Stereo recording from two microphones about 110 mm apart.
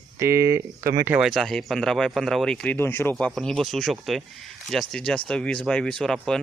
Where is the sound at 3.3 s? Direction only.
Centre (ahead or behind).